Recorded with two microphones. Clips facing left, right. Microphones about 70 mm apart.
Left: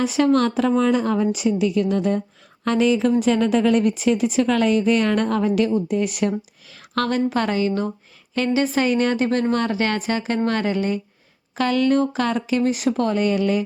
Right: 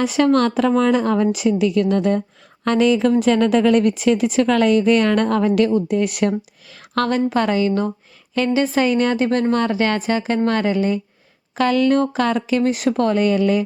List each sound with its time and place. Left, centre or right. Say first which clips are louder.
0.1 s a woman's voice: right 2 dB; right
2.6 s a woman's voice: right 2 dB; right
6.9 s a woman's voice: right 2 dB; right
8.7 s a woman's voice: right 2 dB; right
11.9 s speech: right 2 dB; right